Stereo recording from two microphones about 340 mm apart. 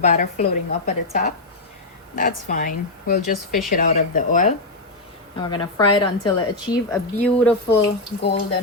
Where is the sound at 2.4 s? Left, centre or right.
Left; by 7.7 s centre.